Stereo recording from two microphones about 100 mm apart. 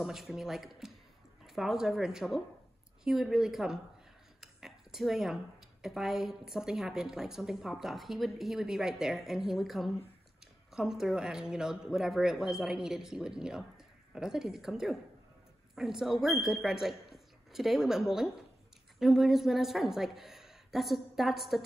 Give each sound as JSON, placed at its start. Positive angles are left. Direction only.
{"t": 0.0, "sound": "a woman's voice", "side_deg": 0}